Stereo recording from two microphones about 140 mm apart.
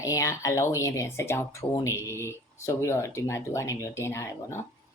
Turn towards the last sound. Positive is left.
turn(degrees=20)  # may be behind; listen again after turning